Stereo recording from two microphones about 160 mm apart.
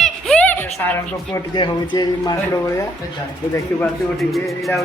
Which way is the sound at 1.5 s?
30° left (ahead or behind).